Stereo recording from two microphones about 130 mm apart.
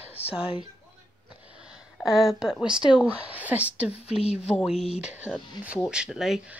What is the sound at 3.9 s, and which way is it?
Speech, 50° left (ahead or behind).